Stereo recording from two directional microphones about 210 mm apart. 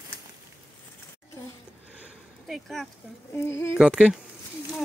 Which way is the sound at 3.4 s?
15° left (ahead or behind).